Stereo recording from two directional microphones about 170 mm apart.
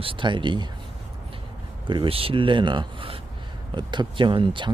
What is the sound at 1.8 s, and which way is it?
Speech, 30° right (ahead or behind).